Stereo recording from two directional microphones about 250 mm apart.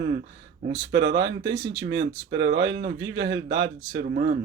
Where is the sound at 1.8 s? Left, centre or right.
Right.